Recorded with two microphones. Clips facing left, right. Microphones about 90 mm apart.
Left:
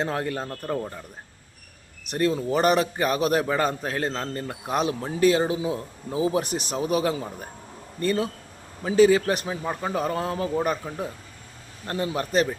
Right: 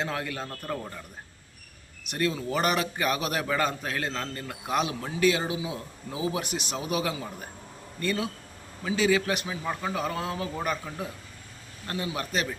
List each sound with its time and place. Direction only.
0.0 s a man's voice: 35° left (ahead or behind)
0.4 s speech: 10° left (ahead or behind)
2.0 s a man's voice: 35° left (ahead or behind)
10.8 s a man's voice: 25° left (ahead or behind)